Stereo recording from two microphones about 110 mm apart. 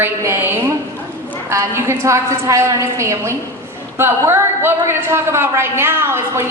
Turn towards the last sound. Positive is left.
turn(degrees=-20)  # may be behind; listen again after turning